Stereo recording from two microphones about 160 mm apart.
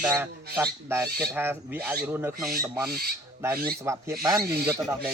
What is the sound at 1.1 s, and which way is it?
Speech, 90° right.